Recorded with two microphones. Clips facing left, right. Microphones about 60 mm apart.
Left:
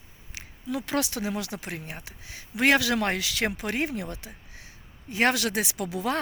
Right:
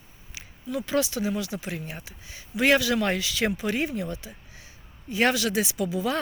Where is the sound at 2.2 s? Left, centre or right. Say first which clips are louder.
Left 1 dB; left.